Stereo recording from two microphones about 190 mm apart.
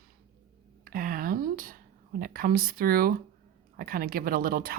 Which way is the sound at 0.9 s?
50° right (ahead or behind).